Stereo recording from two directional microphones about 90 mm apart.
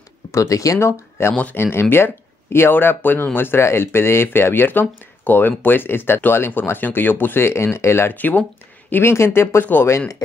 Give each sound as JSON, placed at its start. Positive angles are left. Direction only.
{"t": 0.3, "sound": "speech", "side_deg": 35}
{"t": 0.7, "sound": "speech", "side_deg": 30}
{"t": 1.3, "sound": "speech", "side_deg": 15}
{"t": 1.6, "sound": "speech", "side_deg": 25}